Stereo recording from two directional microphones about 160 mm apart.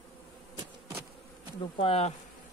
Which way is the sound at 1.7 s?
35° left (ahead or behind).